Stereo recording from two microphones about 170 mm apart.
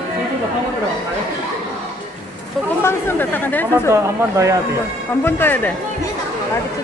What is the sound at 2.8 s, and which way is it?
Speech, 10° left (ahead or behind).